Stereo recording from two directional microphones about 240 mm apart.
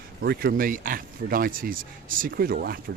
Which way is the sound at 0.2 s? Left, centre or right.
Right.